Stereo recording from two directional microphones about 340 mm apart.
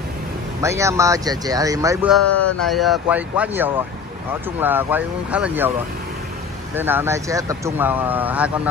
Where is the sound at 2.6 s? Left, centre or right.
Centre.